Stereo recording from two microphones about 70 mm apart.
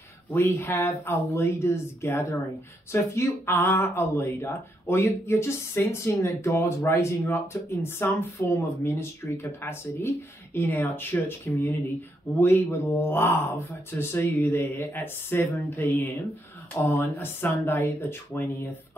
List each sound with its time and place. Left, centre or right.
0.3 s speech: left